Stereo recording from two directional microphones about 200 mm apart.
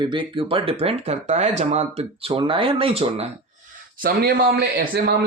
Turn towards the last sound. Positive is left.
turn(degrees=-50)  # may be behind; listen again after turning